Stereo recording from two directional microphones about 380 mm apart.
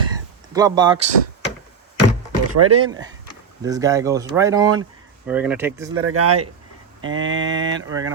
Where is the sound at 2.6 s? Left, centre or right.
Right.